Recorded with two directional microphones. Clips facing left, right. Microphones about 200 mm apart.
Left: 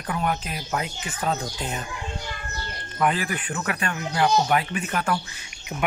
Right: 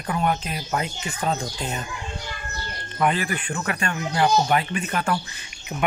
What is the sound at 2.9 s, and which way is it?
Speech, 5° left (ahead or behind).